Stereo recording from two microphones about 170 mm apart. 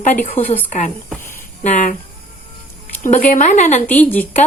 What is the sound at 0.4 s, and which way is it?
Speech, 10° left (ahead or behind).